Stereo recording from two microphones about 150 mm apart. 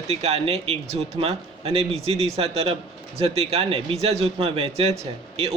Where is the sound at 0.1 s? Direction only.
45° right (ahead or behind).